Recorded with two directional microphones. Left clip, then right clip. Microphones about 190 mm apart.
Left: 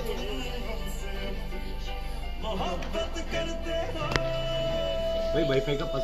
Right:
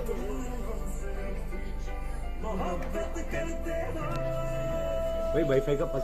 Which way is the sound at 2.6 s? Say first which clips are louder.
Left 1 dB; 40° right (ahead or behind).